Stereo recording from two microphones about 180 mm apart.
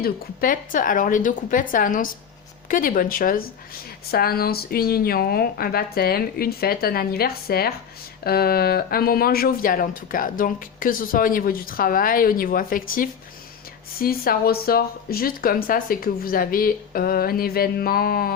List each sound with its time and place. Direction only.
0.0 s speech: 50° left (ahead or behind)